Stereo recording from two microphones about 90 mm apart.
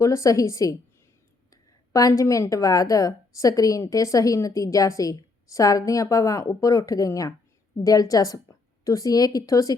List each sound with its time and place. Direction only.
0.0 s a woman's voice: 40° left (ahead or behind)